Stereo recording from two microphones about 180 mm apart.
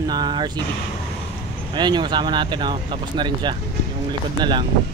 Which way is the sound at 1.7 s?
25° right (ahead or behind).